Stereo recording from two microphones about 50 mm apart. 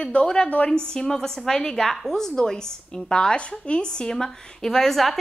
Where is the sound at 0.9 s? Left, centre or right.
Centre.